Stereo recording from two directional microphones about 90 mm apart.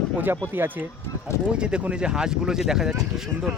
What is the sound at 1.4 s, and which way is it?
Speech, 10° right (ahead or behind).